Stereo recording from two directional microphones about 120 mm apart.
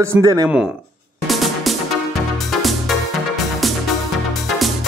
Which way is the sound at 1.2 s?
Centre (ahead or behind).